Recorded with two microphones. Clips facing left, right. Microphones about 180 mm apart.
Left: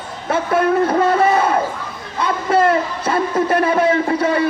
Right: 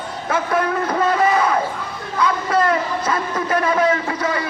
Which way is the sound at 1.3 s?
30° left (ahead or behind).